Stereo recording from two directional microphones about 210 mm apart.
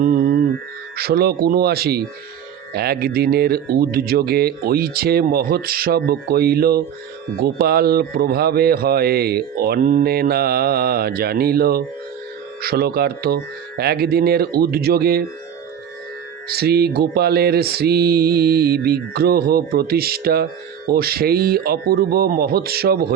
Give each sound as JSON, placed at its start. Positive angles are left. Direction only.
{"t": 0.0, "sound": "mantra", "side_deg": -40}
{"t": 16.5, "sound": "mantra", "side_deg": -50}